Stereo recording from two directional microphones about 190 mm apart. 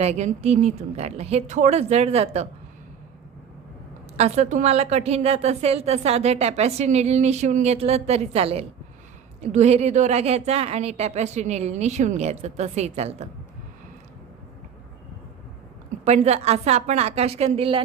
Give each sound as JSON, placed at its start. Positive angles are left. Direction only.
{"t": 0.0, "sound": "a woman's voice", "side_deg": -35}
{"t": 4.2, "sound": "a woman's voice", "side_deg": -35}
{"t": 16.0, "sound": "a woman's voice", "side_deg": -35}